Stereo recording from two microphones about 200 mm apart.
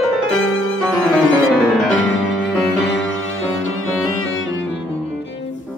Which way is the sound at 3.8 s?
90° left.